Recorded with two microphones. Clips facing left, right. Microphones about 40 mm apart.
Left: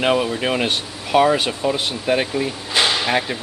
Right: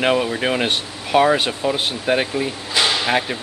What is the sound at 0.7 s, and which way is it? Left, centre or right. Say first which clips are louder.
Speech: right 1 dB; centre.